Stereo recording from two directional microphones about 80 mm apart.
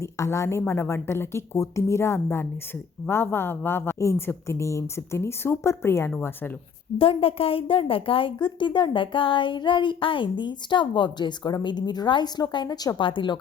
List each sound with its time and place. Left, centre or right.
0.0 s a woman's voice: left
3.9 s a woman's voice: left
7.8 s speech: left
12.6 s a woman's voice: left
13.0 s speech: left